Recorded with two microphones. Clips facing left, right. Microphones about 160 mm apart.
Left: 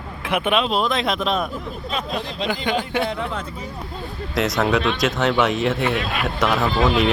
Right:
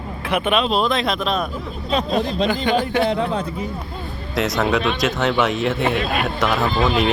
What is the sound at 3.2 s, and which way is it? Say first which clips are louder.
Speech: right 5 dB; 40° right (ahead or behind).